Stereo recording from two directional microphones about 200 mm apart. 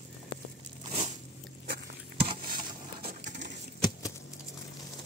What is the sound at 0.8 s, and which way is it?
Crunch, 35° right (ahead or behind).